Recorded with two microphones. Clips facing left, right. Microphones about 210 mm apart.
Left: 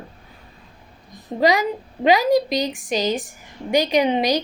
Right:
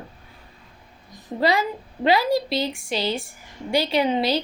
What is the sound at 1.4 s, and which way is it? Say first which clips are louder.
A woman's voice: left 3 dB; 15° left (ahead or behind).